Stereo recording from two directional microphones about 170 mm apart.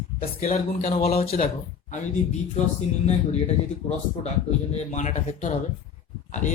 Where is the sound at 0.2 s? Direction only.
55° left (ahead or behind).